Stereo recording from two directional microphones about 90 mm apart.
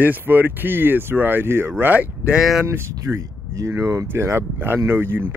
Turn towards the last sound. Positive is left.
turn(degrees=-25)  # may be behind; listen again after turning